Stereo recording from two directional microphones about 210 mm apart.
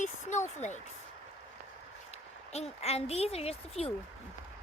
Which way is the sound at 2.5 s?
30° left (ahead or behind).